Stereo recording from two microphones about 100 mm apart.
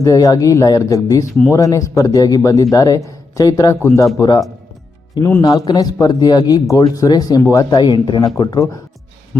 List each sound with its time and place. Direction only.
0.0 s a man's voice: 35° left (ahead or behind)